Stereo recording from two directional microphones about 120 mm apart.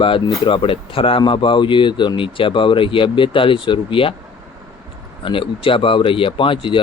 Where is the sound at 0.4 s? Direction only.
45° left (ahead or behind).